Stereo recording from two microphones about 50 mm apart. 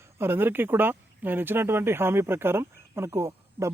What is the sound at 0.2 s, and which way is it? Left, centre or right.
Speech, right.